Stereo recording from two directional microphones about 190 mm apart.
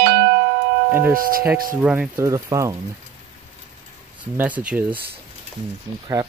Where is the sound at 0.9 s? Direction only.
10° right (ahead or behind).